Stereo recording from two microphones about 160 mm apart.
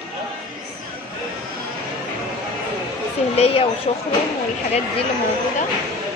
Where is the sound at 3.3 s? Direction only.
40° left (ahead or behind).